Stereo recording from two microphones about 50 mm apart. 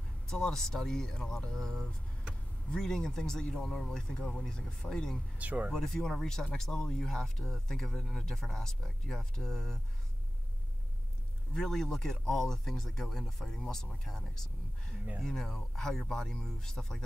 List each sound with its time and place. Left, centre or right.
0.3 s speech: centre
5.4 s speech: right
5.7 s speech: centre
11.5 s speech: centre